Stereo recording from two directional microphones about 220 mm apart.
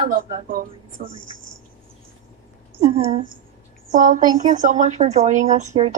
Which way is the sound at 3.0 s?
25° right (ahead or behind).